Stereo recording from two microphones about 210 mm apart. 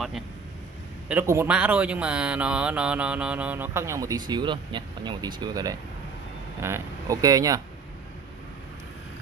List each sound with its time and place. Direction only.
1.0 s speech: 10° right (ahead or behind)